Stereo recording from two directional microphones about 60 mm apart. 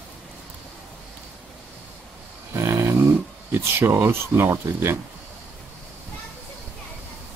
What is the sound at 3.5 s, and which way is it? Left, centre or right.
Speech, right.